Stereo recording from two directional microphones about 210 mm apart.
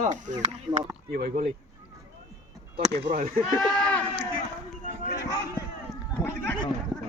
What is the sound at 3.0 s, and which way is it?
Speech, 35° right (ahead or behind).